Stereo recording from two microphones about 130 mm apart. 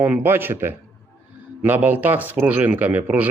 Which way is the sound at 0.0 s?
15° right (ahead or behind).